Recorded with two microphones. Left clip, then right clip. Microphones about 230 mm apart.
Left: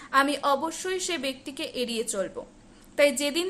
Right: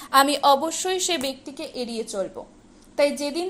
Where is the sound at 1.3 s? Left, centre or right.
Centre.